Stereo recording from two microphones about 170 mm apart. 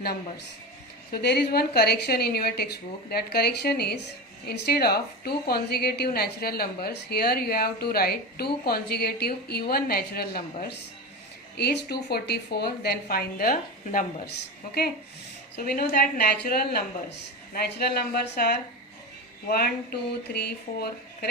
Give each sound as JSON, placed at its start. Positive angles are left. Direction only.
{"t": 1.1, "sound": "a woman's voice", "side_deg": 70}
{"t": 11.5, "sound": "a woman's voice", "side_deg": 75}
{"t": 15.5, "sound": "a woman's voice", "side_deg": 65}